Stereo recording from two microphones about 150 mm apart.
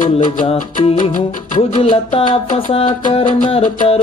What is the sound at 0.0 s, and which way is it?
Music, 60° left (ahead or behind).